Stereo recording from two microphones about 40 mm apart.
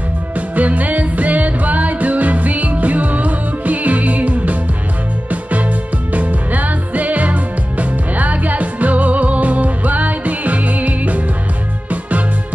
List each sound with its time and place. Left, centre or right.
0.6 s music: right